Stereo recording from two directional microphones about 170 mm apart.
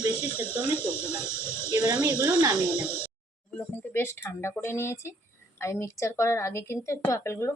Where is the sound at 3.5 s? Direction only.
10° left (ahead or behind).